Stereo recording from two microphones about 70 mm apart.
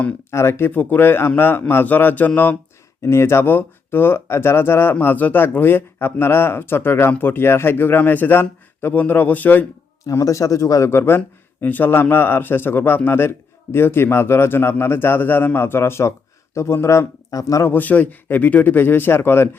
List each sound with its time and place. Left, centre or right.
0.3 s a man's voice: left
3.0 s a man's voice: left
10.1 s a man's voice: left
10.8 s speech: left
17.3 s a man's voice: left
17.7 s a man's voice: left